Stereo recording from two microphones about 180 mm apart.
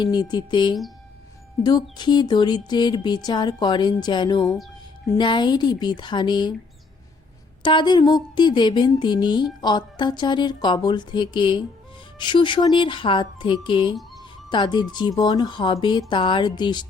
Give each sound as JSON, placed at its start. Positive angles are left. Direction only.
{"t": 0.0, "sound": "a woman's voice", "side_deg": 25}
{"t": 7.6, "sound": "a woman's voice", "side_deg": 25}